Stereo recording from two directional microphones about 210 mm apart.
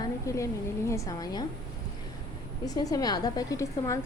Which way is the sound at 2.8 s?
20° left (ahead or behind).